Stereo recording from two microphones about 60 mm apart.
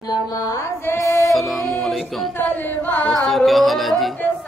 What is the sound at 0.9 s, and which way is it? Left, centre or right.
Music, left.